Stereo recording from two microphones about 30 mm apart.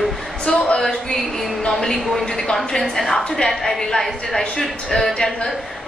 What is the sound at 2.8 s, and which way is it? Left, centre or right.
A woman's voice, centre.